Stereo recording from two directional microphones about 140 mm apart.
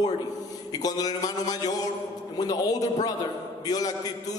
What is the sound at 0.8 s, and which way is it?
A man's voice, 25° left (ahead or behind).